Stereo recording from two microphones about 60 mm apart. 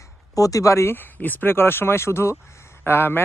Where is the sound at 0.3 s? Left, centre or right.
Left.